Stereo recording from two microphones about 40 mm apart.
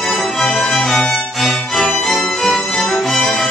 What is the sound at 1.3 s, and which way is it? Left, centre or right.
Music, centre.